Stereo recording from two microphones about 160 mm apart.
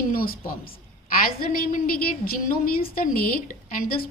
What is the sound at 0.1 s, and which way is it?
A woman's voice, 65° left (ahead or behind).